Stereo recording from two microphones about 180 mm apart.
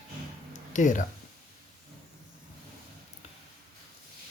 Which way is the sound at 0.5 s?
45° left (ahead or behind).